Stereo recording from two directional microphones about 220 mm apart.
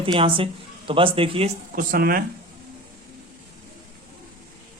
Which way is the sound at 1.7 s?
40° right (ahead or behind).